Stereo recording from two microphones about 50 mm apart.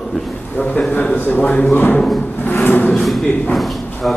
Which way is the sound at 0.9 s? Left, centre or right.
Left.